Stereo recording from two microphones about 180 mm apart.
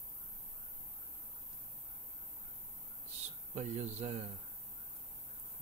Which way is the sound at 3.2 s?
35° right (ahead or behind).